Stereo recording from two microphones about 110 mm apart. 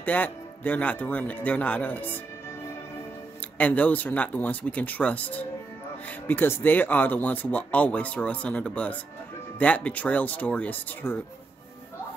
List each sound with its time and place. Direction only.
0.0 s speech: 15° left (ahead or behind)
3.5 s speech: 15° left (ahead or behind)